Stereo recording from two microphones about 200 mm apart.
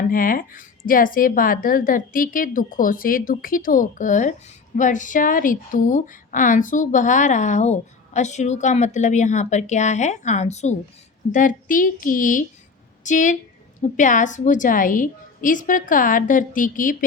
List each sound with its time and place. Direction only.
0.1 s speech: 45° left (ahead or behind)